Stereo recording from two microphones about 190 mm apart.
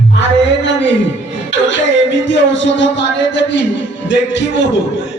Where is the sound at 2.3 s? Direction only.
75° left (ahead or behind).